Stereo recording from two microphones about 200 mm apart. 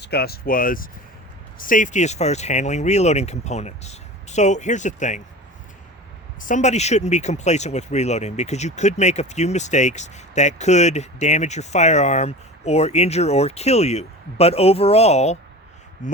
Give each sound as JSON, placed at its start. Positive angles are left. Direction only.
{"t": 0.0, "sound": "speech", "side_deg": 55}
{"t": 6.4, "sound": "speech", "side_deg": 35}